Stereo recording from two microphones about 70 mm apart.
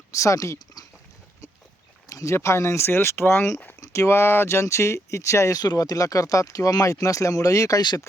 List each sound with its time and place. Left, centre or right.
0.1 s speech: left
2.0 s a sound: left
2.3 s speech: left
7.8 s speech: left